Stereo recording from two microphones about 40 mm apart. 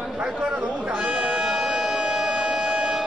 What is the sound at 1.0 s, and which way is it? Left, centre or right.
Music, centre.